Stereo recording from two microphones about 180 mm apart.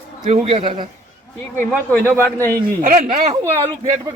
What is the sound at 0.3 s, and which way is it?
Speech, 35° right (ahead or behind).